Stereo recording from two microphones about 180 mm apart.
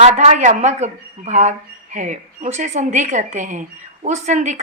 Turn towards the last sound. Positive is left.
turn(degrees=-40)  # may be behind; listen again after turning